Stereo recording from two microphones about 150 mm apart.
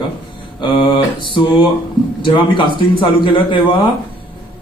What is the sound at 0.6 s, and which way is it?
Speech, 35° left (ahead or behind).